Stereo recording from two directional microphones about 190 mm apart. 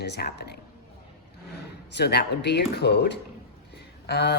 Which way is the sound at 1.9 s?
60° left (ahead or behind).